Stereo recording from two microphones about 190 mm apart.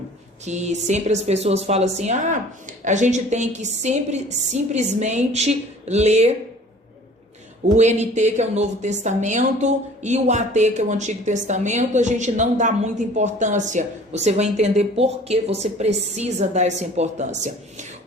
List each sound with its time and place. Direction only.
0.4 s a woman's voice: 35° right (ahead or behind)
7.8 s a woman's voice: 35° right (ahead or behind)